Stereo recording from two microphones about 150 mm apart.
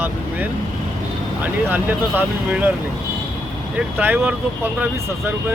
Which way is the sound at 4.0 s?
15° right (ahead or behind).